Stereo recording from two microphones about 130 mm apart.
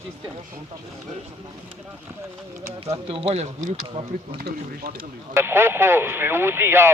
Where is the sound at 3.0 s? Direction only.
45° right (ahead or behind).